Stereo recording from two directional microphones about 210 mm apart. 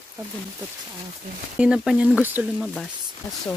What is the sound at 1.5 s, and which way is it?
Speech, 5° right (ahead or behind).